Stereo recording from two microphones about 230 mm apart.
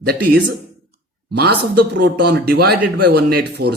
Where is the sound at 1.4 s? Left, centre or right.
Right.